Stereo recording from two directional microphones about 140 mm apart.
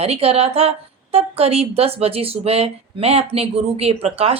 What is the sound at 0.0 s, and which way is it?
Speech, 45° right (ahead or behind).